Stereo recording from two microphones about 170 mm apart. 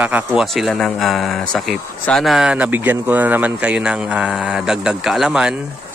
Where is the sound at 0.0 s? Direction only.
5° right (ahead or behind).